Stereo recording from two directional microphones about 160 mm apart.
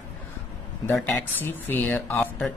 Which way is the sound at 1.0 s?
10° left (ahead or behind).